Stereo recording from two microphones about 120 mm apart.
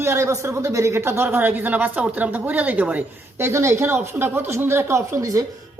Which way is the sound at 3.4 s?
25° right (ahead or behind).